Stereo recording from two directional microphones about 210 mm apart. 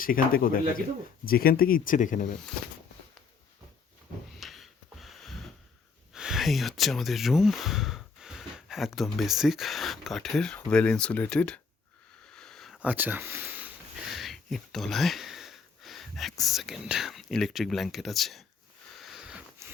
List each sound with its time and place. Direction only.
0.0 s speech: 45° left (ahead or behind)
4.4 s gasp: centre (ahead or behind)
6.1 s speech: centre (ahead or behind)
12.2 s a sound: 5° left (ahead or behind)
14.1 s speech: centre (ahead or behind)
19.0 s sniff: 5° right (ahead or behind)